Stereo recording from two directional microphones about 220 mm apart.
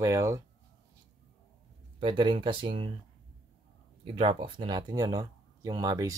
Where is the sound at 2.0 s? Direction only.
20° right (ahead or behind).